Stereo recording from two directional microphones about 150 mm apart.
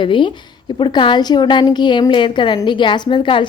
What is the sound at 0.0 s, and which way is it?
A woman's voice, 35° left (ahead or behind).